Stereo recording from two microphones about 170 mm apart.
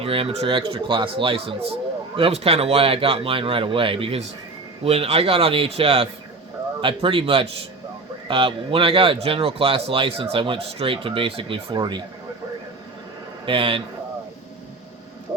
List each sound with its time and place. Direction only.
0.0 s a man's voice: 35° right (ahead or behind)
13.4 s speech: 30° right (ahead or behind)